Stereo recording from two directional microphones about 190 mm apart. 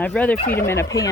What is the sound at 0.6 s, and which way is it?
Speech, 15° left (ahead or behind).